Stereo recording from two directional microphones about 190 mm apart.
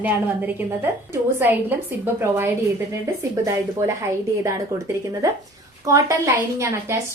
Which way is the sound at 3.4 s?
15° right (ahead or behind).